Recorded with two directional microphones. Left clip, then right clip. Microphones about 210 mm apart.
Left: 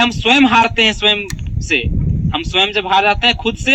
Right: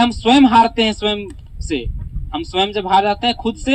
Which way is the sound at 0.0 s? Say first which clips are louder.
Left 1 dB; 35° right (ahead or behind).